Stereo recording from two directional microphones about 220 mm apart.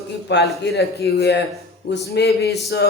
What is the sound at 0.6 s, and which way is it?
Speech, 45° left (ahead or behind).